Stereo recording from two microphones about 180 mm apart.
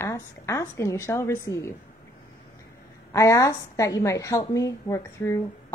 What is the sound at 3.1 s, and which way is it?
A woman's voice, 15° left (ahead or behind).